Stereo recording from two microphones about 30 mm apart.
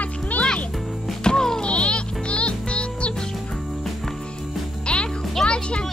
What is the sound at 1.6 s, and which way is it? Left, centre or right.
Music, left.